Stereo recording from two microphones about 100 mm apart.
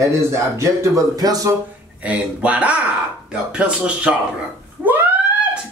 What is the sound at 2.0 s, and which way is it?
Speech, 15° right (ahead or behind).